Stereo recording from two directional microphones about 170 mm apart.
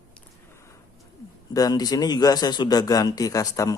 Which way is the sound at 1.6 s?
20° left (ahead or behind).